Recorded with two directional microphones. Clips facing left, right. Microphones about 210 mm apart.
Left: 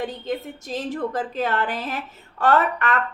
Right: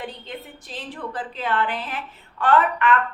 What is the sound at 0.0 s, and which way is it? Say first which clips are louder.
A woman's voice: left 7 dB; 45° left (ahead or behind).